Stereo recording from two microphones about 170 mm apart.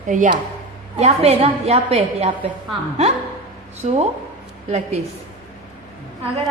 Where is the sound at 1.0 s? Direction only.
35° right (ahead or behind).